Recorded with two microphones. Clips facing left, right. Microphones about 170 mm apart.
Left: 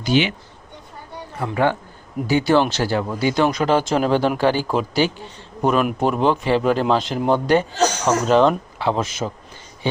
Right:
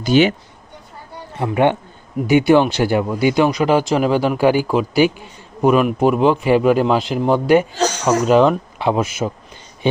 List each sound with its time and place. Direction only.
0.0 s speech: 45° right (ahead or behind)
1.4 s speech: 25° right (ahead or behind)